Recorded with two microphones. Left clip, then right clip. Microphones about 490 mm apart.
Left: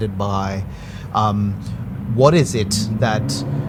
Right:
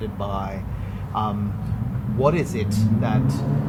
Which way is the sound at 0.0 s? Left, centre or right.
Left.